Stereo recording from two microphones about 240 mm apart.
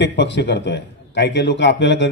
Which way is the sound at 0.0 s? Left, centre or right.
Left.